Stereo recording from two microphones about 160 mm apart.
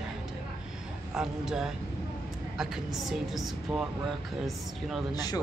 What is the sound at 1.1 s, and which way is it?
Speech, 5° right (ahead or behind).